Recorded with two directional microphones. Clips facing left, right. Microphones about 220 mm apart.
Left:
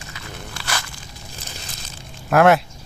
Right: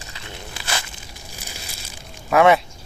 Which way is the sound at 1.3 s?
10° right (ahead or behind).